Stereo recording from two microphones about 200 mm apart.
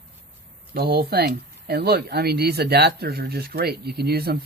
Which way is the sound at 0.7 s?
50° right (ahead or behind).